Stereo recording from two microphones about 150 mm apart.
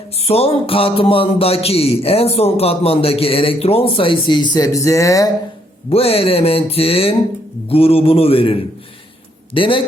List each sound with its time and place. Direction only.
0.2 s a man's voice: 40° left (ahead or behind); by 5.3 s 20° left (ahead or behind)
5.9 s a man's voice: 40° left (ahead or behind)